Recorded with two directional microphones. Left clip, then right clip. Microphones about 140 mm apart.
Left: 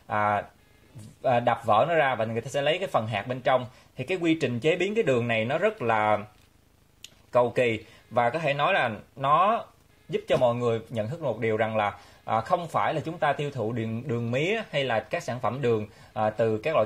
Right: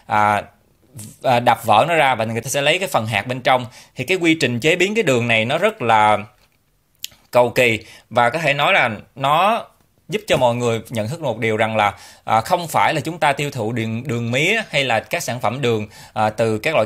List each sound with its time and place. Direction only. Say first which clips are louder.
0.1 s speech: right 9 dB; 20° right (ahead or behind)
16.2 s speech: right 7 dB; 20° right (ahead or behind)